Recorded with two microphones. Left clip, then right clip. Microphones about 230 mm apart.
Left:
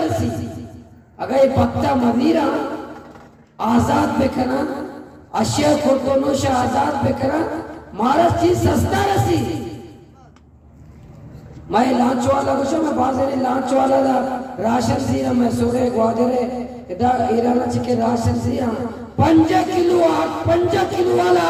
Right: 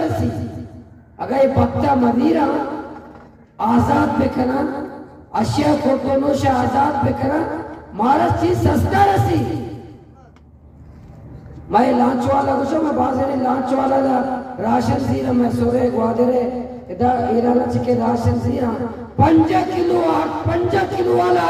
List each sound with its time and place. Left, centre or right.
1.2 s speech: left
3.6 s speech: left
11.7 s speech: left